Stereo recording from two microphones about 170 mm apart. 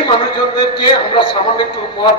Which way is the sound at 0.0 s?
30° left (ahead or behind).